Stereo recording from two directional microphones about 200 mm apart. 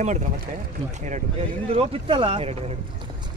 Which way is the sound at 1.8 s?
25° right (ahead or behind).